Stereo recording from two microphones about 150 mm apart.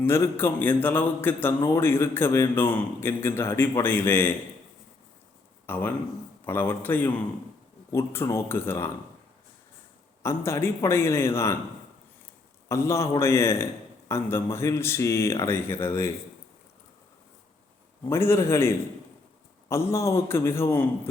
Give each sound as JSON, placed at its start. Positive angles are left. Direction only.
{"t": 0.0, "sound": "speech", "side_deg": 15}
{"t": 5.6, "sound": "speech", "side_deg": 15}
{"t": 10.2, "sound": "speech", "side_deg": 15}
{"t": 12.6, "sound": "speech", "side_deg": 20}
{"t": 18.0, "sound": "speech", "side_deg": 15}